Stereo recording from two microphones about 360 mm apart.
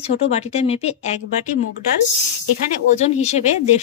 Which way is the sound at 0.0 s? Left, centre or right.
Centre.